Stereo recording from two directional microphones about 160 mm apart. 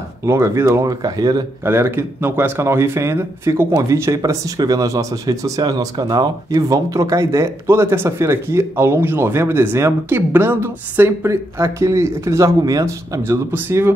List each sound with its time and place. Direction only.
0.2 s speech: 15° right (ahead or behind)